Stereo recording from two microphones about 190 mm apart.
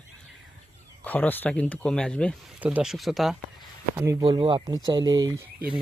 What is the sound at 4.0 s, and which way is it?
Speech, 15° right (ahead or behind).